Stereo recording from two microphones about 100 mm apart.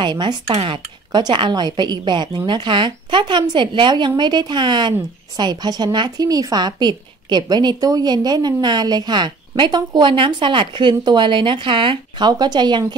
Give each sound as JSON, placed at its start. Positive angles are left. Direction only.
{"t": 0.0, "sound": "a woman's voice", "side_deg": -50}